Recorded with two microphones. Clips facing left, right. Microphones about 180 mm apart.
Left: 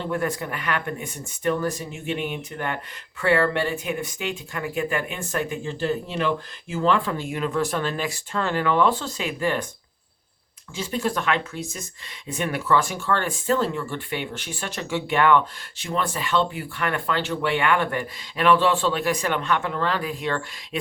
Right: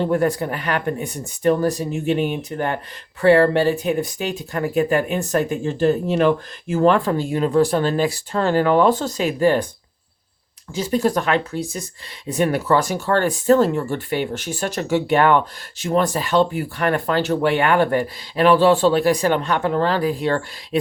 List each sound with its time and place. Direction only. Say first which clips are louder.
0.0 s speech: right 7 dB; 40° right (ahead or behind)
10.8 s speech: right 7 dB; 40° right (ahead or behind)